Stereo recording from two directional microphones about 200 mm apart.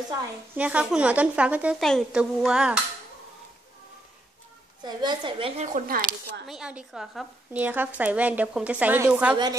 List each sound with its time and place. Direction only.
0.6 s a woman's voice: 5° right (ahead or behind)
4.8 s a woman's voice: 20° right (ahead or behind)
5.7 s speech: 40° right (ahead or behind)
6.4 s speech: 5° right (ahead or behind)
9.3 s a woman's voice: 20° right (ahead or behind)